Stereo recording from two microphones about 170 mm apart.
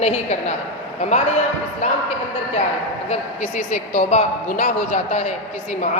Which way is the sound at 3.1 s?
45° left (ahead or behind).